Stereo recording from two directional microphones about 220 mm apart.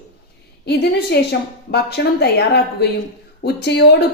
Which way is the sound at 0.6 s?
50° left (ahead or behind).